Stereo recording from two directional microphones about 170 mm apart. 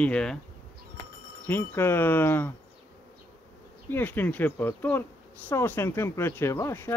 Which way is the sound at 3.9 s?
10° left (ahead or behind).